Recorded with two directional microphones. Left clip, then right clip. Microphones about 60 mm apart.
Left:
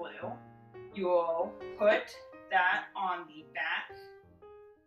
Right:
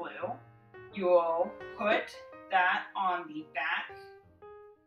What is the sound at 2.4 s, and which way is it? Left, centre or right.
Speech, centre.